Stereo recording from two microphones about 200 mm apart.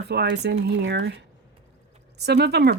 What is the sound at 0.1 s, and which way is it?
Speech, 55° right (ahead or behind).